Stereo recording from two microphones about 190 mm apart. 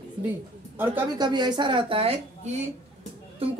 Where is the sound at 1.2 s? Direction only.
20° right (ahead or behind).